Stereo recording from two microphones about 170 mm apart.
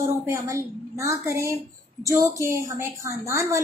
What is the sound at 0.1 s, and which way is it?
A woman's voice, 15° right (ahead or behind).